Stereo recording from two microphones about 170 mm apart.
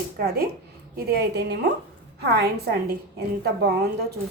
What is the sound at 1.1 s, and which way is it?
A woman's voice, 75° right (ahead or behind).